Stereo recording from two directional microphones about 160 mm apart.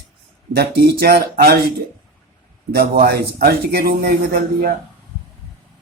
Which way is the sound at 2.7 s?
75° right (ahead or behind).